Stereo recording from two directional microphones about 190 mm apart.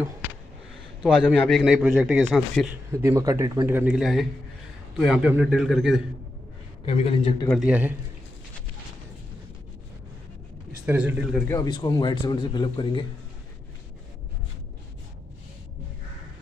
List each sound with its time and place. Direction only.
1.0 s a man's voice: centre (ahead or behind)
2.9 s a man's voice: 15° right (ahead or behind)
6.9 s a man's voice: 30° left (ahead or behind)
7.6 s a man's voice: 5° right (ahead or behind)
10.9 s a man's voice: 10° right (ahead or behind)
11.3 s speech: 15° left (ahead or behind)